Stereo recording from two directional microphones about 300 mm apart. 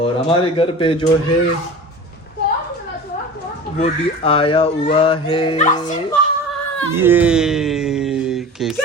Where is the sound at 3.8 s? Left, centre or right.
Centre.